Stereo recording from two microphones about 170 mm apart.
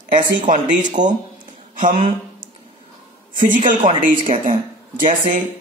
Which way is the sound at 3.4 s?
50° right (ahead or behind).